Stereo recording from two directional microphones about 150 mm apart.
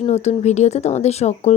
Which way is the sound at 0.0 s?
50° left (ahead or behind).